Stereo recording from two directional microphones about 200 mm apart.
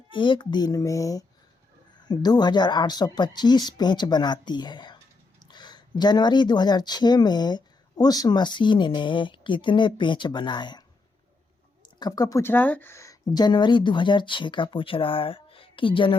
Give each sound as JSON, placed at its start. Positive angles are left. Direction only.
{"t": 0.1, "sound": "speech", "side_deg": 25}